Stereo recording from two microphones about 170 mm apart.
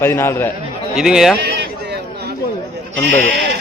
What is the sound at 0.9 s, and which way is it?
Speech, 5° right (ahead or behind).